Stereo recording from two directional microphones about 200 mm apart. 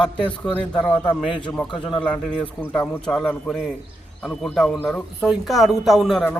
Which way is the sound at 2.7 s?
5° left (ahead or behind).